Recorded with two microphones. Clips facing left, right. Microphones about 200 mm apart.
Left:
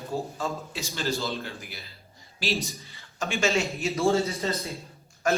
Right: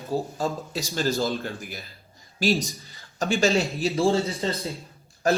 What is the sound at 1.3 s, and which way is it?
A man's voice, 50° right (ahead or behind).